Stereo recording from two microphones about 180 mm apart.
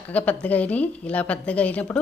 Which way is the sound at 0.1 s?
10° left (ahead or behind).